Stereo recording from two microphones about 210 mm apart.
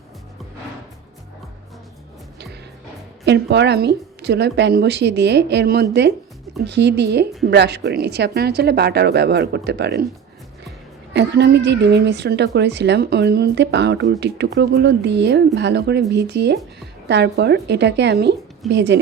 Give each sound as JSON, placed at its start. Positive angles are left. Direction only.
{"t": 3.2, "sound": "a woman's voice", "side_deg": -55}
{"t": 11.1, "sound": "a woman's voice", "side_deg": -55}